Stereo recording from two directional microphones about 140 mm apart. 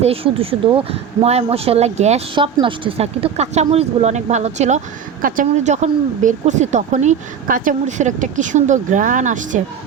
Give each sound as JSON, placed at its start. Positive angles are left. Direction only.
{"t": 0.0, "sound": "speech", "side_deg": -45}
{"t": 2.3, "sound": "speech", "side_deg": -35}
{"t": 5.2, "sound": "a woman's voice", "side_deg": -65}